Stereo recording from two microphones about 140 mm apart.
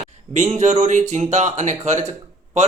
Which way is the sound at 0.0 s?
55° right (ahead or behind).